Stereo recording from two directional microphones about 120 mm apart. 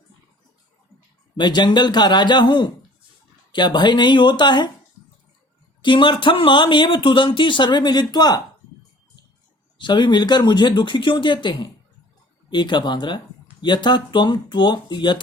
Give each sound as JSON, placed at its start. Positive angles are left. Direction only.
{"t": 1.4, "sound": "speech", "side_deg": 40}
{"t": 5.8, "sound": "speech", "side_deg": 40}
{"t": 9.7, "sound": "speech", "side_deg": 40}